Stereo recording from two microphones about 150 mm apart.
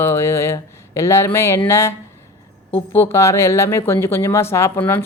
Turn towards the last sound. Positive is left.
turn(degrees=10)  # may be behind; listen again after turning